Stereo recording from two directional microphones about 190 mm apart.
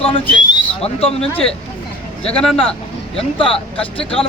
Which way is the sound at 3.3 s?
30° left (ahead or behind).